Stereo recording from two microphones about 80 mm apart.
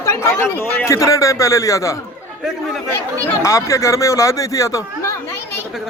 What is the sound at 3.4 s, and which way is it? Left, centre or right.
Speech, left.